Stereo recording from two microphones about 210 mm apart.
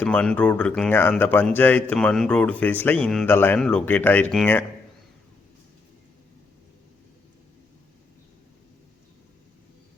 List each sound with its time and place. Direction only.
0.0 s speech: 5° left (ahead or behind)